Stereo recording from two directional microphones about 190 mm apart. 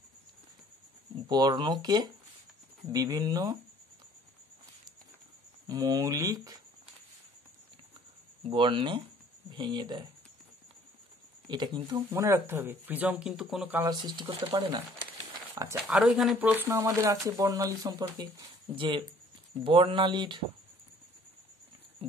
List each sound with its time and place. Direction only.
1.2 s speech: 20° right (ahead or behind)
5.7 s speech: 20° right (ahead or behind)
8.5 s speech: 25° right (ahead or behind)
11.4 s speech: 25° right (ahead or behind); by 13.8 s 5° right (ahead or behind)
13.8 s speech: 20° right (ahead or behind)
15.9 s speech: centre (ahead or behind); by 20.4 s 25° right (ahead or behind)